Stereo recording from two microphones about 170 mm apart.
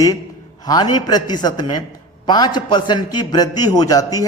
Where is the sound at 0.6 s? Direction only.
25° left (ahead or behind).